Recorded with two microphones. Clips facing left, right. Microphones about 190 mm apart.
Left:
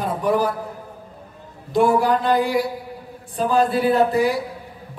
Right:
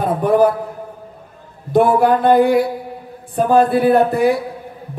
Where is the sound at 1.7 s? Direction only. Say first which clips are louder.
Right 4 dB; 55° right (ahead or behind).